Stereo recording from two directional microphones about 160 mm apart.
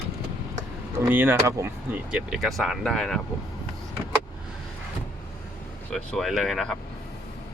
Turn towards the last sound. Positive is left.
turn(degrees=0)  # may be behind; listen again after turning